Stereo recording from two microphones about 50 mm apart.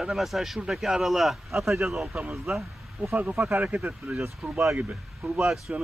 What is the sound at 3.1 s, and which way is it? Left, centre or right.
Speech, right.